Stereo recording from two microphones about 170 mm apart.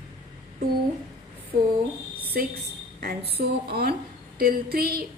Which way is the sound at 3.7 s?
65° right (ahead or behind).